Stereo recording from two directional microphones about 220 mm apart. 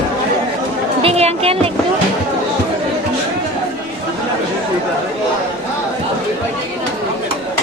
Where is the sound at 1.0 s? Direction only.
25° right (ahead or behind).